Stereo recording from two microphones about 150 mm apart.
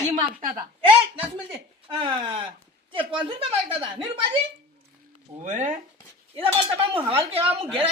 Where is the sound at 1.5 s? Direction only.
35° right (ahead or behind).